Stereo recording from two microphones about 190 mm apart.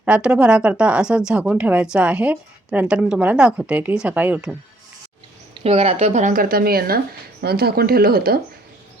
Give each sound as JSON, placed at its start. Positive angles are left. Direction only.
{"t": 0.0, "sound": "speech", "side_deg": -5}
{"t": 5.6, "sound": "speech", "side_deg": -30}